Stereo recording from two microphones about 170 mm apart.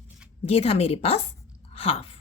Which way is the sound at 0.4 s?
35° left (ahead or behind).